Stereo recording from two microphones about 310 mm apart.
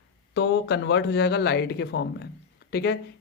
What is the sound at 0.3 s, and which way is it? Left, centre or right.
Speech, left.